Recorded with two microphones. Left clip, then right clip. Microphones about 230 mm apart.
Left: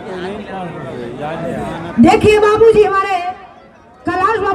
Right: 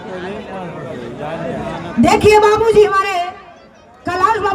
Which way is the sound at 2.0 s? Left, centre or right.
Right.